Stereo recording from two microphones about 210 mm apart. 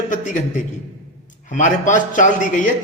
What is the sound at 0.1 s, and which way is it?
A man's voice, 35° left (ahead or behind).